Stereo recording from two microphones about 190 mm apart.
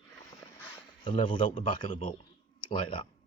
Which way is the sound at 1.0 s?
25° left (ahead or behind).